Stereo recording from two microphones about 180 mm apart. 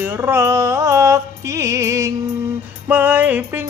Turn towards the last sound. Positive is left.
turn(degrees=-10)  # may be behind; listen again after turning